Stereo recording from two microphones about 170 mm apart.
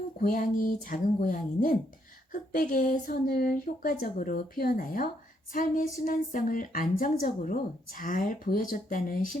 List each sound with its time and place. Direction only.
0.2 s speech: 55° left (ahead or behind)